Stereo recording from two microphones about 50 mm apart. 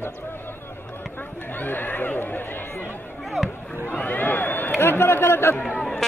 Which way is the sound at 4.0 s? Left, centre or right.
Left.